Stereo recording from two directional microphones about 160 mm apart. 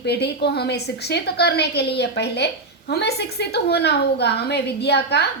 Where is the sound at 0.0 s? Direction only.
90° left.